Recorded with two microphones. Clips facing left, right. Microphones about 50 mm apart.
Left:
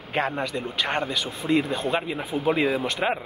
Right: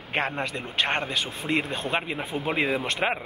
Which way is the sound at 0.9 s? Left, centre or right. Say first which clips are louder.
Left 1 dB; centre.